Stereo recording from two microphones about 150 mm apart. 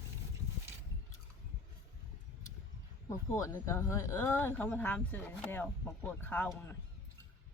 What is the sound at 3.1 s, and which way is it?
Speech, 20° left (ahead or behind).